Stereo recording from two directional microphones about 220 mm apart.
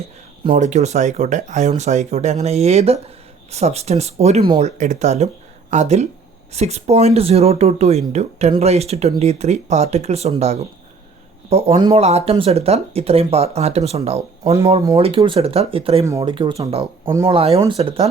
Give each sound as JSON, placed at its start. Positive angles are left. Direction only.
{"t": 0.5, "sound": "speech", "side_deg": -35}